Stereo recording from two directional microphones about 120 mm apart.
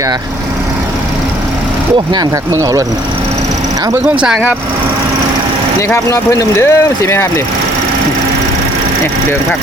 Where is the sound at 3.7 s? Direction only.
30° right (ahead or behind).